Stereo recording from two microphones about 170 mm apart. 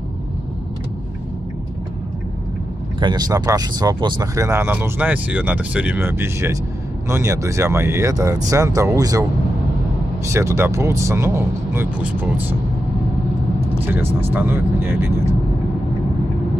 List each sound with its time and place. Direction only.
3.0 s speech: 25° right (ahead or behind)
10.2 s speech: 15° right (ahead or behind)
14.3 s speech: 15° right (ahead or behind)